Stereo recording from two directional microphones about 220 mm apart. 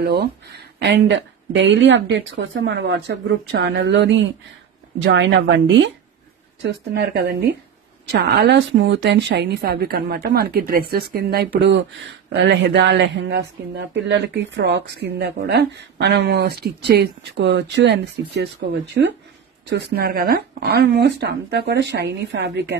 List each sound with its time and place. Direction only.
0.0 s a woman's voice: 45° right (ahead or behind)